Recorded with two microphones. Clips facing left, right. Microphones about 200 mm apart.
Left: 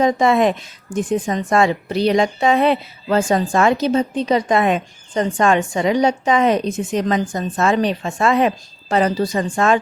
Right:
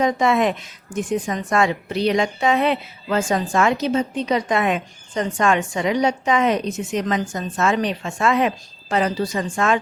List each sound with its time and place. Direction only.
0.0 s a woman's voice: 35° left (ahead or behind)